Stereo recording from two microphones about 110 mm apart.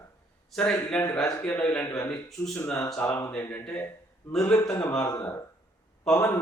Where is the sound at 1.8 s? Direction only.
20° left (ahead or behind).